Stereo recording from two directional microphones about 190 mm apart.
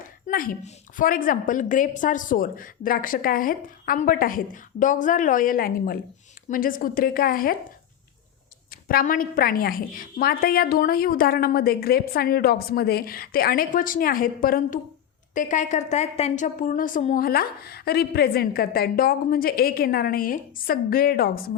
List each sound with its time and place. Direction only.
0.0 s a woman's voice: 45° left (ahead or behind)
8.7 s a woman's voice: 50° left (ahead or behind)